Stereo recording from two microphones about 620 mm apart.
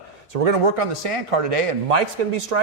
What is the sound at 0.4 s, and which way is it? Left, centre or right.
A man's voice, right.